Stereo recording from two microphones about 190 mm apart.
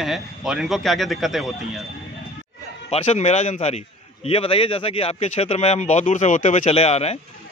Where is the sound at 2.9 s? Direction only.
35° left (ahead or behind).